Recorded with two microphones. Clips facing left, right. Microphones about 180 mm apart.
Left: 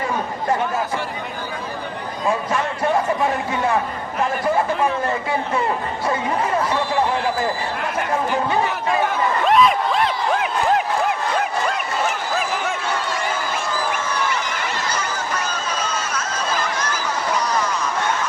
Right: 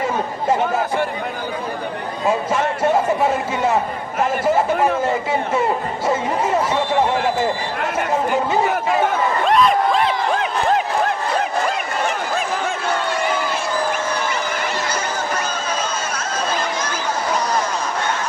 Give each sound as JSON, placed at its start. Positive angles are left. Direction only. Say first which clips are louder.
{"t": 2.2, "sound": "speech", "louder": "right 3 dB", "side_deg": -25}
{"t": 6.1, "sound": "speech", "louder": "right 2 dB", "side_deg": -25}
{"t": 9.5, "sound": "a sound", "louder": "right 1 dB", "side_deg": 0}